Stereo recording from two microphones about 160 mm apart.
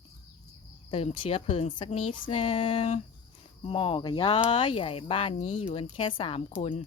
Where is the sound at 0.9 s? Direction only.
35° left (ahead or behind).